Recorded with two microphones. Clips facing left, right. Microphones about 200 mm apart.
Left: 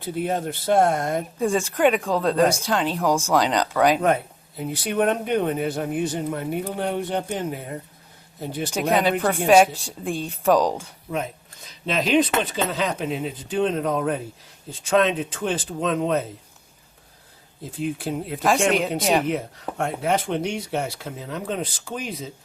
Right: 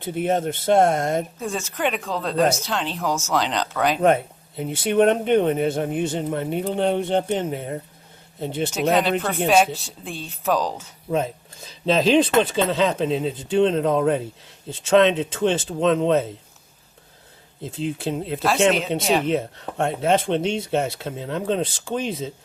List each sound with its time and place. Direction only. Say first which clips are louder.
0.0 s speech: right 3 dB; 20° right (ahead or behind)
1.4 s speech: left 6 dB; centre (ahead or behind)
1.8 s speech: left 5 dB; 10° left (ahead or behind)
4.0 s speech: right 3 dB; 25° right (ahead or behind)
8.7 s speech: even; 10° left (ahead or behind)
11.1 s speech: right 5 dB; 30° right (ahead or behind)
17.6 s speech: right 1 dB; 25° right (ahead or behind)